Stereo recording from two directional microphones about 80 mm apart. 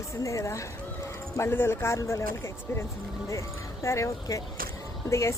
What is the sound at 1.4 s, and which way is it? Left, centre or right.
A woman's voice, left.